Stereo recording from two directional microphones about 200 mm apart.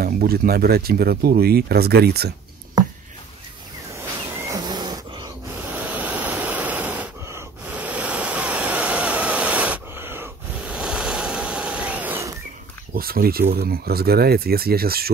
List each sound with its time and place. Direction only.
0.0 s speech: 50° right (ahead or behind)
4.5 s a sound: 20° right (ahead or behind)
5.7 s waves: 10° right (ahead or behind)
12.9 s speech: 50° right (ahead or behind)